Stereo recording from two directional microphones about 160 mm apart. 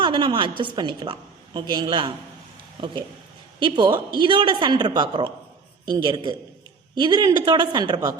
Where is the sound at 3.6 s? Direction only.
30° right (ahead or behind).